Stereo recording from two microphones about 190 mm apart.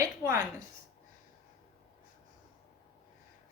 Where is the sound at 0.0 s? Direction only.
15° right (ahead or behind).